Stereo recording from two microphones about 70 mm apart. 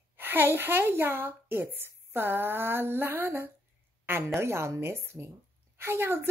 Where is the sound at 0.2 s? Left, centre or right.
Right.